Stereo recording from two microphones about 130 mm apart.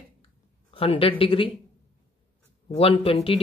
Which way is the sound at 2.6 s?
50° left (ahead or behind).